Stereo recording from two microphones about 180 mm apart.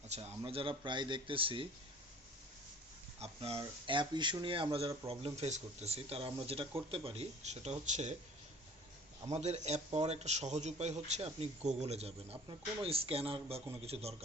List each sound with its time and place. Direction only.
0.1 s speech: 35° right (ahead or behind)
3.2 s speech: 35° right (ahead or behind)
9.3 s speech: 35° right (ahead or behind)